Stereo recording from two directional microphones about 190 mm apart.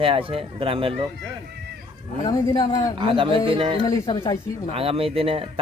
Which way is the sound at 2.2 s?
20° left (ahead or behind).